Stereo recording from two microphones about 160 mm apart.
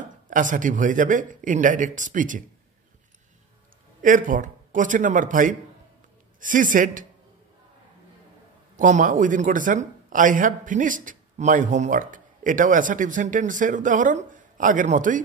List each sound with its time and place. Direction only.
0.3 s speech: 55° right (ahead or behind)
4.0 s speech: 55° right (ahead or behind)
8.7 s speech: 50° right (ahead or behind)